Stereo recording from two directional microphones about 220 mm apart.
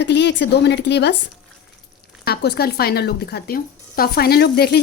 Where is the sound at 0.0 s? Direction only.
50° left (ahead or behind).